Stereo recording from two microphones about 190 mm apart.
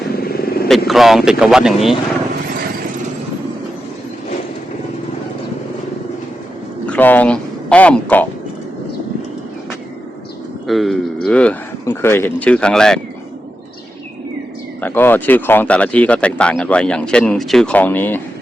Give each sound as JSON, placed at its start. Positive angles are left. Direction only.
{"t": 0.2, "sound": "vehicle", "side_deg": 55}
{"t": 0.9, "sound": "speech", "side_deg": 0}
{"t": 6.8, "sound": "speech", "side_deg": 10}
{"t": 10.7, "sound": "speech", "side_deg": 0}
{"t": 14.8, "sound": "speech", "side_deg": 10}